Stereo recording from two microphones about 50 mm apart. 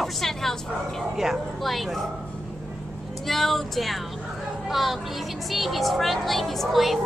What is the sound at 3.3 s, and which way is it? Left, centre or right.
Speech, centre.